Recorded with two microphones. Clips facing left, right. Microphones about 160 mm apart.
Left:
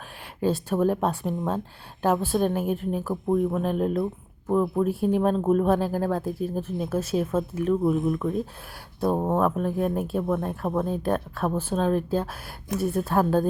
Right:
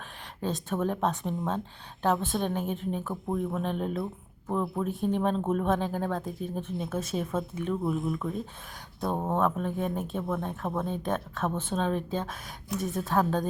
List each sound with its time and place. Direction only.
0.4 s speech: 5° left (ahead or behind)